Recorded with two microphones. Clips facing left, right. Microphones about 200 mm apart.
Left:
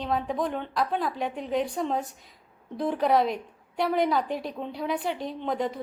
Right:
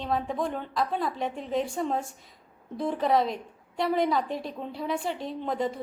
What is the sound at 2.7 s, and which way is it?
A woman's voice, centre (ahead or behind).